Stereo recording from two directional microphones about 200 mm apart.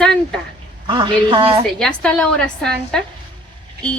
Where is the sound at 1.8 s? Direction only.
5° left (ahead or behind).